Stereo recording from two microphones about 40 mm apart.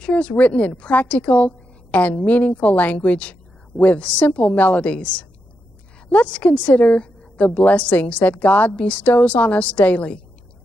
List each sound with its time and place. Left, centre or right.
0.0 s a woman's voice: left
6.2 s a woman's voice: left